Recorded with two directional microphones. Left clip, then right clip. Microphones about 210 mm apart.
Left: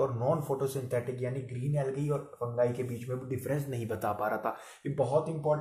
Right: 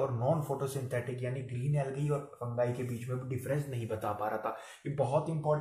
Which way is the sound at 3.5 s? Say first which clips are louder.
Left 1 dB; 50° left (ahead or behind).